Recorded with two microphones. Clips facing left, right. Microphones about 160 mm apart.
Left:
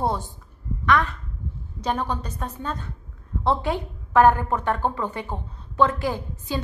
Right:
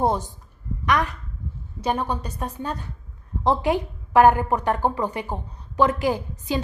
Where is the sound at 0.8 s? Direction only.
15° right (ahead or behind).